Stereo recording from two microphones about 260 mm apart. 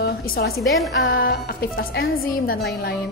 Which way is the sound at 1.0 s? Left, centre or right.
Left.